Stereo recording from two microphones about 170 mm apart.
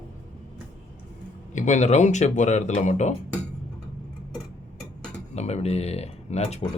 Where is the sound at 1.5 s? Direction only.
45° left (ahead or behind).